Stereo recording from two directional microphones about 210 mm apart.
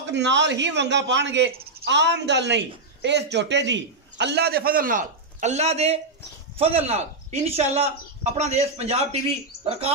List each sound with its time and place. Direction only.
0.0 s a man's voice: 55° right (ahead or behind); by 9.9 s 30° right (ahead or behind)